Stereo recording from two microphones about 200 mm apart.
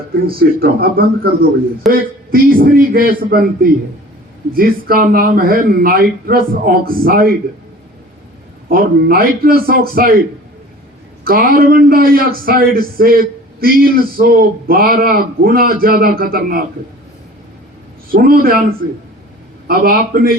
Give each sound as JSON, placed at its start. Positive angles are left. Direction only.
{"t": 0.3, "sound": "a man's voice", "side_deg": -50}
{"t": 8.7, "sound": "a man's voice", "side_deg": -45}
{"t": 11.2, "sound": "a man's voice", "side_deg": -45}
{"t": 18.1, "sound": "a man's voice", "side_deg": -45}
{"t": 19.6, "sound": "a man's voice", "side_deg": -50}